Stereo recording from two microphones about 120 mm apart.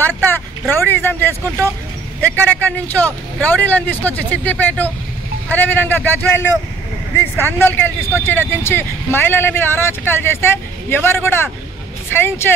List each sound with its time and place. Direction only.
0.0 s speech: 15° left (ahead or behind)
7.5 s speech: 15° left (ahead or behind)